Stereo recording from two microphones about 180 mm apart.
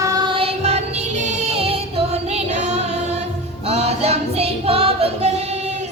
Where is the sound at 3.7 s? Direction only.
35° right (ahead or behind).